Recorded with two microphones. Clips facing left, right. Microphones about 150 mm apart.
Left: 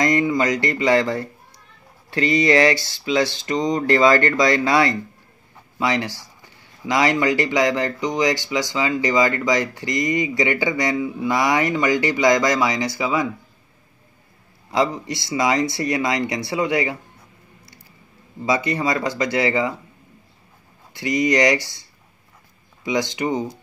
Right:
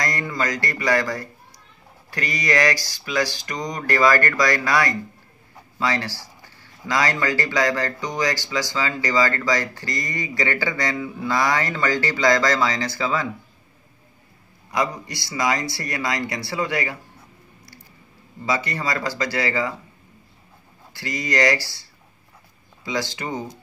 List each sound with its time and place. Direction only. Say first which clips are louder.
0.0 s speech: left 7 dB; 20° left (ahead or behind)
14.7 s speech: left 4 dB; 25° left (ahead or behind)
18.4 s speech: left 4 dB; 20° left (ahead or behind)
20.9 s speech: left 7 dB; 20° left (ahead or behind)
22.8 s speech: left 5 dB; 20° left (ahead or behind)